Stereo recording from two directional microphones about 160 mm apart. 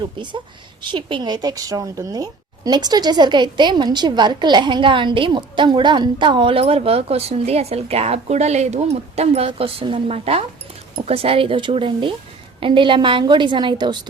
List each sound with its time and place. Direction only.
0.8 s speech: 30° right (ahead or behind)